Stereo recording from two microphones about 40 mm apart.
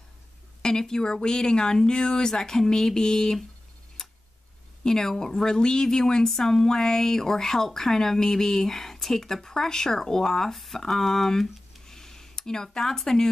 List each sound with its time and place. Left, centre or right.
0.6 s speech: centre
4.0 s tick-tock: centre
4.8 s speech: centre